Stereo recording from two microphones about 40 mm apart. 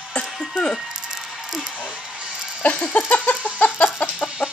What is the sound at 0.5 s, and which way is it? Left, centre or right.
Speech, centre.